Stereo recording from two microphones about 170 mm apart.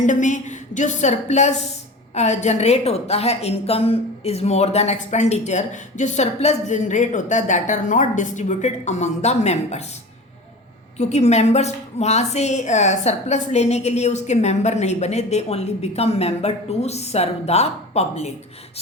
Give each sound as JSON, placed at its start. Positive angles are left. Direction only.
{"t": 0.0, "sound": "a woman's voice", "side_deg": 45}
{"t": 10.9, "sound": "a woman's voice", "side_deg": 40}